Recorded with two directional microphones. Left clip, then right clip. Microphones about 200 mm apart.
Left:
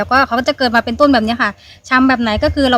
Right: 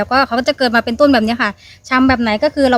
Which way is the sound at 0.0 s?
20° right (ahead or behind).